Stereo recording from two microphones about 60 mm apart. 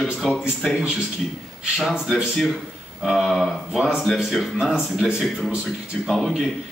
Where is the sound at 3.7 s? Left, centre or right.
Centre.